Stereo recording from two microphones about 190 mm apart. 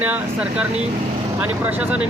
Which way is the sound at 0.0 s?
5° right (ahead or behind).